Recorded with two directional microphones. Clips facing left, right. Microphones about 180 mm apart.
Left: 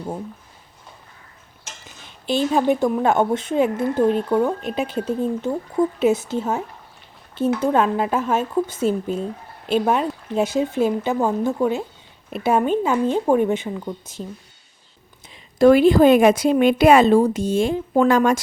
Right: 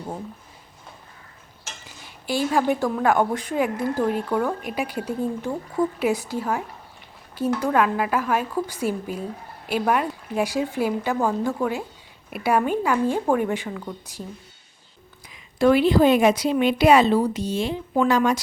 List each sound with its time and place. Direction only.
2.0 s a woman's voice: 20° left (ahead or behind)
15.3 s a woman's voice: 40° left (ahead or behind)